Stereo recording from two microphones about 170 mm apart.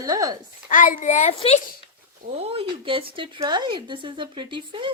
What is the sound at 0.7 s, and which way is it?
Speech, 50° left (ahead or behind).